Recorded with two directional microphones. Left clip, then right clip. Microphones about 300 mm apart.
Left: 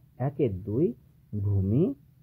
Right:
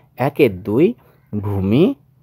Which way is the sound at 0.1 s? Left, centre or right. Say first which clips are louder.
Right 14 dB; right.